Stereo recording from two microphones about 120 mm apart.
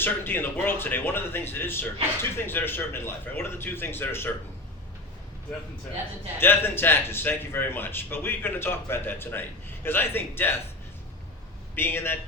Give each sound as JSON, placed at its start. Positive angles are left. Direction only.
{"t": 0.0, "sound": "a man's voice", "side_deg": 15}
{"t": 6.4, "sound": "a man's voice", "side_deg": 20}
{"t": 11.7, "sound": "a man's voice", "side_deg": 20}